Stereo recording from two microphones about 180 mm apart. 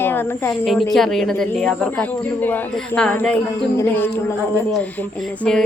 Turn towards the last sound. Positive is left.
turn(degrees=5)  # may be behind; listen again after turning